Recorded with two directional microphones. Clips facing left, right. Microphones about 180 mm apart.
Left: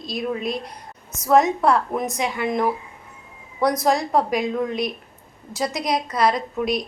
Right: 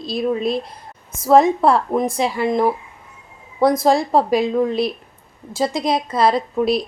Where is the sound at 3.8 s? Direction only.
30° right (ahead or behind).